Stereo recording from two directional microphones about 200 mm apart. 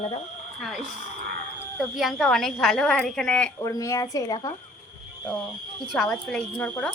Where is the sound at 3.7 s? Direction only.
15° left (ahead or behind).